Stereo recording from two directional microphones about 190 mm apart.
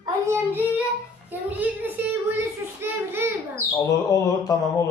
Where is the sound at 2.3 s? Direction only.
10° right (ahead or behind).